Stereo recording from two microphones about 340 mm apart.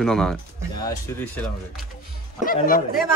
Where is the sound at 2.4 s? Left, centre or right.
Left.